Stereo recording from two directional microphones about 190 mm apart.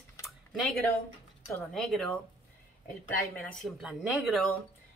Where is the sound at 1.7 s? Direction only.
Centre (ahead or behind).